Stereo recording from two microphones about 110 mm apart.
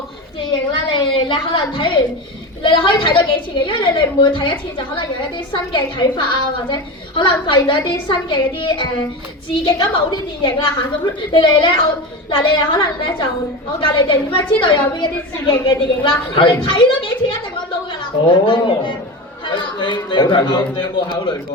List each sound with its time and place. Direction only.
0.9 s a woman's voice: 50° left (ahead or behind)
19.5 s chatter: 50° left (ahead or behind)
20.1 s a woman's voice: 45° left (ahead or behind)